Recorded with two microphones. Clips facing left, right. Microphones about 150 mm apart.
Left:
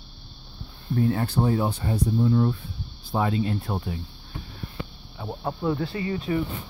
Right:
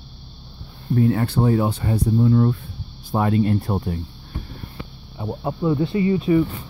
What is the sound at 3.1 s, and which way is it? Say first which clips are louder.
Speech: right 5 dB; 50° right (ahead or behind).